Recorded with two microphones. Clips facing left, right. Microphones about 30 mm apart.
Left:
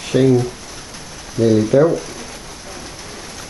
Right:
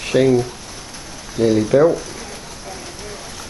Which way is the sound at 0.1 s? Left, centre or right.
Right.